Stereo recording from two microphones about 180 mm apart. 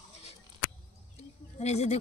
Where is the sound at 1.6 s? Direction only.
35° left (ahead or behind).